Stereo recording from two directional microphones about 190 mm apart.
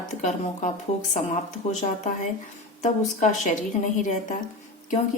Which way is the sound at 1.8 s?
40° left (ahead or behind).